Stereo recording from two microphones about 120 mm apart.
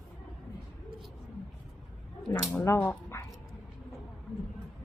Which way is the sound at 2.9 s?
25° left (ahead or behind).